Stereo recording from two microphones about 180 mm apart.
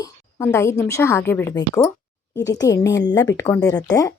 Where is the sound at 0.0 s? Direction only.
15° left (ahead or behind).